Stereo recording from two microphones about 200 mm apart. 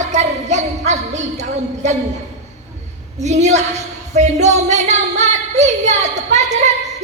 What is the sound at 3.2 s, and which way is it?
A woman's voice, 35° right (ahead or behind).